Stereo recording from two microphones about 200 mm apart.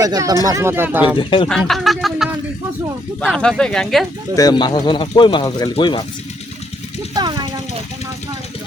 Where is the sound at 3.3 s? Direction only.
5° left (ahead or behind).